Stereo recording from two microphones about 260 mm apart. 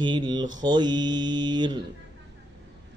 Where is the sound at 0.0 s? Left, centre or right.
Centre.